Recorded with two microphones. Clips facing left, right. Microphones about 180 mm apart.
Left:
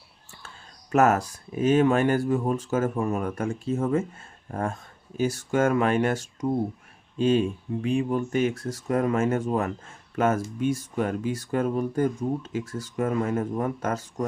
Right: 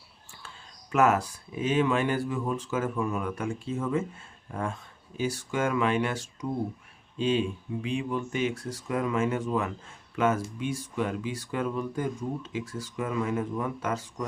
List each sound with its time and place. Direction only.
0.4 s speech: 45° left (ahead or behind)